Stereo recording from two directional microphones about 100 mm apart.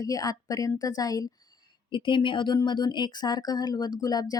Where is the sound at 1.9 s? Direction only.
55° left (ahead or behind).